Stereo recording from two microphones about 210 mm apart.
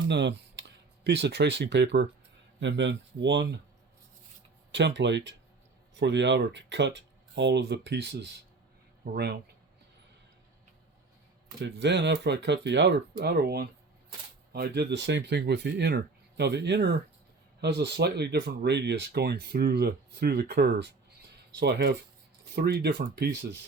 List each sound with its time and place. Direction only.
0.1 s speech: 55° right (ahead or behind)
4.7 s speech: 55° right (ahead or behind)
11.6 s speech: 55° right (ahead or behind)